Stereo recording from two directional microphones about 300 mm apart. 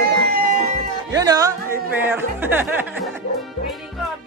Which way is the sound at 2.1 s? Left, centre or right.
Centre.